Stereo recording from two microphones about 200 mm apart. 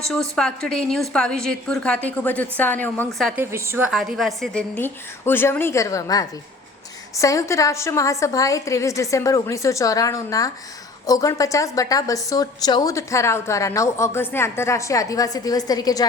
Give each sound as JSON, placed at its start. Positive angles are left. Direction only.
{"t": 0.1, "sound": "a woman's voice", "side_deg": 5}
{"t": 3.4, "sound": "a woman's voice", "side_deg": -10}